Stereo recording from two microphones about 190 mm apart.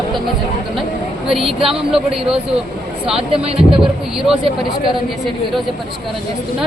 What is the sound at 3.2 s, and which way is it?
Speech, 30° right (ahead or behind).